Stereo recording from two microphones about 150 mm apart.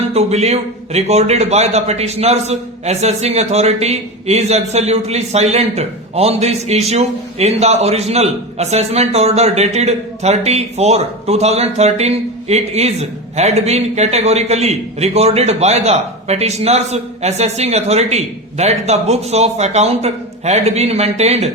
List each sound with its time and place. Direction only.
0.1 s a man's voice: 45° right (ahead or behind)